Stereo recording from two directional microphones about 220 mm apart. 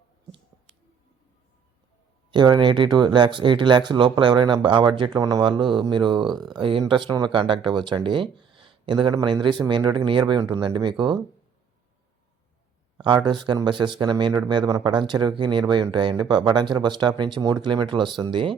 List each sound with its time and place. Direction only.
2.3 s speech: 20° right (ahead or behind)
13.0 s speech: 20° right (ahead or behind)